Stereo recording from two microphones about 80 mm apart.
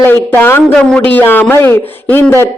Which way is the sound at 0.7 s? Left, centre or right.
Centre.